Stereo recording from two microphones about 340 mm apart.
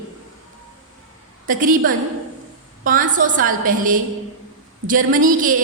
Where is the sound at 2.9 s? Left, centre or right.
Right.